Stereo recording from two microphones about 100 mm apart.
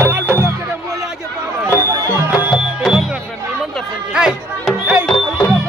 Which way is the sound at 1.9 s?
25° right (ahead or behind).